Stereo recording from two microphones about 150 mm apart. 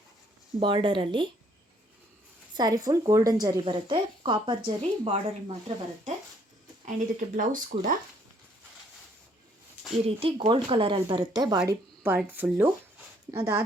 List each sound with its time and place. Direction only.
0.6 s speech: 35° right (ahead or behind)
2.6 s a woman's voice: 25° right (ahead or behind)
6.8 s speech: 60° right (ahead or behind)
10.2 s speech: 40° right (ahead or behind)
12.0 s a woman's voice: 15° right (ahead or behind)